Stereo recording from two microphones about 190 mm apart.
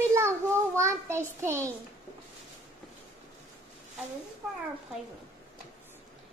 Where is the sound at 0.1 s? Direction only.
15° right (ahead or behind).